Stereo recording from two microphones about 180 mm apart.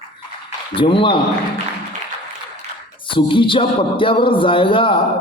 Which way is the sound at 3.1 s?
30° left (ahead or behind).